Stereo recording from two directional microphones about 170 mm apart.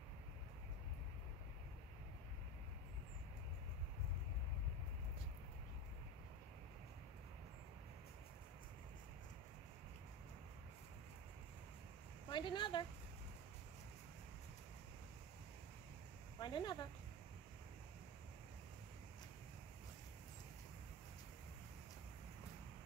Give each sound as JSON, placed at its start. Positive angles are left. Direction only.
{"t": 12.3, "sound": "speech", "side_deg": 25}
{"t": 16.3, "sound": "speech", "side_deg": 25}